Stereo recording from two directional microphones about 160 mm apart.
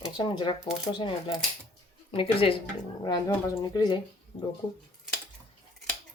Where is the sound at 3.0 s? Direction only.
25° left (ahead or behind).